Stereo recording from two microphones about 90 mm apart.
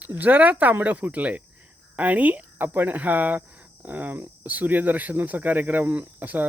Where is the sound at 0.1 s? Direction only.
20° right (ahead or behind).